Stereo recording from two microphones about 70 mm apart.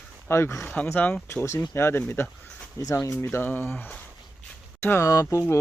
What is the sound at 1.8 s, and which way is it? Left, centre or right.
Speech, left.